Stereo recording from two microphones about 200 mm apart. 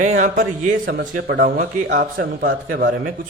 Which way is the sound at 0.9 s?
55° right (ahead or behind).